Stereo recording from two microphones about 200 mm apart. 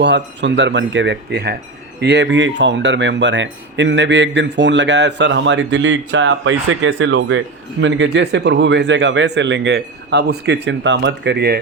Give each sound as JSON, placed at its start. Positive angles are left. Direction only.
{"t": 0.0, "sound": "speech", "side_deg": -60}